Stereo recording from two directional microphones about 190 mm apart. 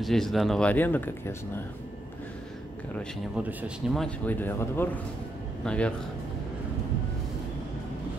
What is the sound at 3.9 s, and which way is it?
A man's voice, 5° left (ahead or behind).